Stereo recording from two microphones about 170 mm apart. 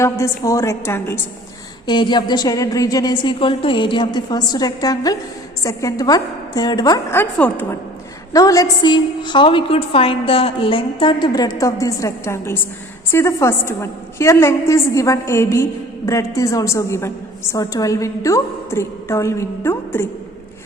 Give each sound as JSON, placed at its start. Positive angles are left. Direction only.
{"t": 0.0, "sound": "a woman's voice", "side_deg": 20}
{"t": 1.9, "sound": "a woman's voice", "side_deg": 25}
{"t": 8.3, "sound": "a woman's voice", "side_deg": 20}